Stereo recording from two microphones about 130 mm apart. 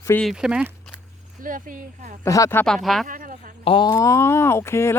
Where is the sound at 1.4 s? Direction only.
90° right.